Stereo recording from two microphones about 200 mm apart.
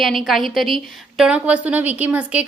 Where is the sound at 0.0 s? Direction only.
Centre (ahead or behind).